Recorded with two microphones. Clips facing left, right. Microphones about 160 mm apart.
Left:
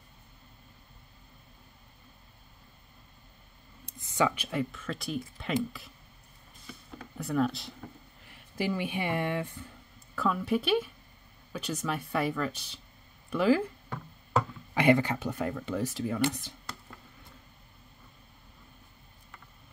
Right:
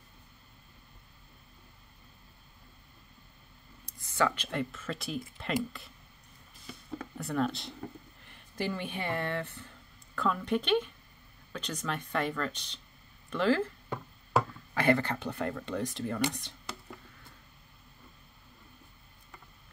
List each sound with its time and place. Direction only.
3.8 s speech: 20° left (ahead or behind); by 5.9 s centre (ahead or behind)
7.2 s speech: centre (ahead or behind)
14.7 s speech: 15° left (ahead or behind)